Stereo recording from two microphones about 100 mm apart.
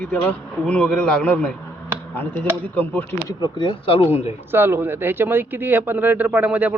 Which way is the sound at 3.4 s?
50° left (ahead or behind).